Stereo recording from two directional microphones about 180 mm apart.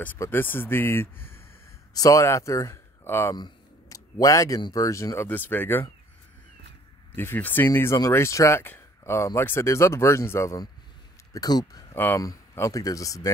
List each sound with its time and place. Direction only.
0.0 s speech: 10° left (ahead or behind)
7.2 s speech: 10° left (ahead or behind)